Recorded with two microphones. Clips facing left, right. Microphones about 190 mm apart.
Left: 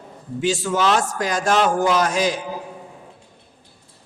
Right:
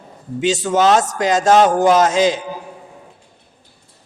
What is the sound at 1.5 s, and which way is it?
Speech, 45° right (ahead or behind).